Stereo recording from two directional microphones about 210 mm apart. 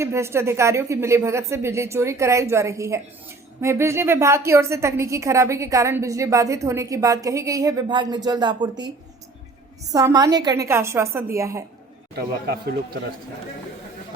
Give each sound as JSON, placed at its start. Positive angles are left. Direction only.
{"t": 0.0, "sound": "a woman's voice", "side_deg": -15}
{"t": 9.9, "sound": "a woman's voice", "side_deg": -15}
{"t": 12.1, "sound": "speech", "side_deg": -45}